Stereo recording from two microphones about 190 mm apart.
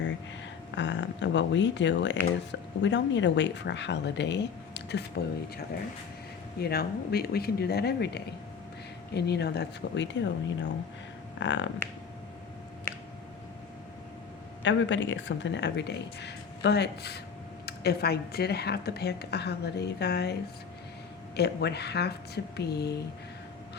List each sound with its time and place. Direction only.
0.8 s speech: 70° left (ahead or behind)
6.6 s a woman's voice: 55° left (ahead or behind); by 11.7 s 75° left (ahead or behind)
12.9 s a sound: 10° left (ahead or behind)
14.6 s a woman's voice: 75° left (ahead or behind)
21.3 s a woman's voice: 60° left (ahead or behind)